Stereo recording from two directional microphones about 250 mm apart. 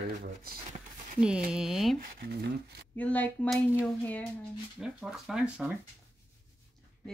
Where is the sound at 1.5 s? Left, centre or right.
Centre.